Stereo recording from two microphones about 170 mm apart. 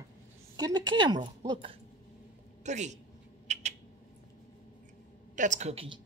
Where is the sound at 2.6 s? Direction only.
45° right (ahead or behind).